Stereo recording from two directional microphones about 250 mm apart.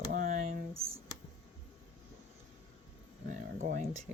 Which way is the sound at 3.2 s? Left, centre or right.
Right.